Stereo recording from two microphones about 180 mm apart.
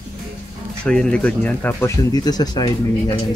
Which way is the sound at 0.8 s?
5° left (ahead or behind).